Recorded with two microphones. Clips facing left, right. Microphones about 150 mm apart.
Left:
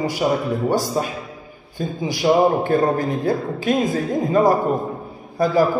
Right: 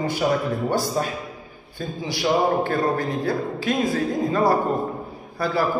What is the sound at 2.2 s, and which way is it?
Speech, 15° left (ahead or behind).